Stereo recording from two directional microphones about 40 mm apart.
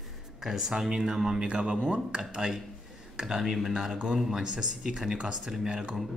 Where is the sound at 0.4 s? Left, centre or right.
Centre.